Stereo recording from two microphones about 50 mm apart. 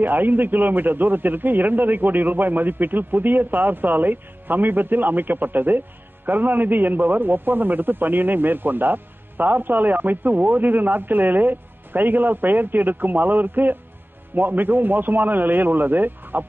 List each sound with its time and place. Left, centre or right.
0.0 s a man's voice: right